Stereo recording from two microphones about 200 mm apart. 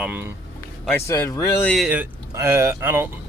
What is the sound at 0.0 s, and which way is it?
Speech, 10° right (ahead or behind).